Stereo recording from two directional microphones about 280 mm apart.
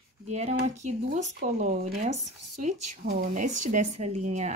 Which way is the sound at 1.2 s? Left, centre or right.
Right.